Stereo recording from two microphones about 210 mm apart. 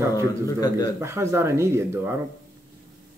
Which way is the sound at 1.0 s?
10° right (ahead or behind).